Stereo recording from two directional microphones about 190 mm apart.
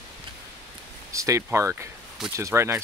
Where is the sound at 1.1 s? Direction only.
15° right (ahead or behind).